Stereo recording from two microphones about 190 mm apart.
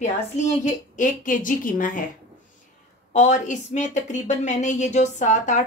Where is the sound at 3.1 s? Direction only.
40° left (ahead or behind).